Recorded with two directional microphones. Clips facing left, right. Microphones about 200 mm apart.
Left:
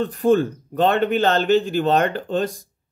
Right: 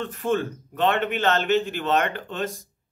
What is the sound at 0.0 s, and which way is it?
Speech, 35° left (ahead or behind).